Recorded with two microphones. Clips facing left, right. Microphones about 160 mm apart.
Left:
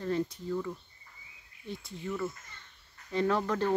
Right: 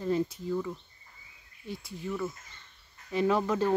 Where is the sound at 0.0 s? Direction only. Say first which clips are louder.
Right 3 dB; 10° right (ahead or behind).